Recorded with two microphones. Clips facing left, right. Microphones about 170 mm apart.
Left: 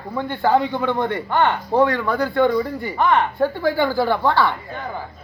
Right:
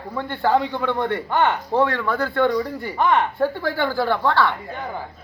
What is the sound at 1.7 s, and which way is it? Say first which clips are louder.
Speech: left 2 dB; centre (ahead or behind).